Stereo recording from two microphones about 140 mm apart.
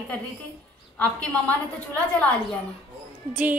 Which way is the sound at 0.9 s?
10° left (ahead or behind).